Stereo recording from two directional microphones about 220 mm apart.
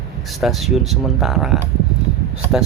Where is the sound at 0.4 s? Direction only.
5° right (ahead or behind).